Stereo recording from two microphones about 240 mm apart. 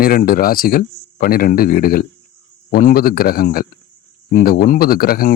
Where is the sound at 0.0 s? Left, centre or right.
Left.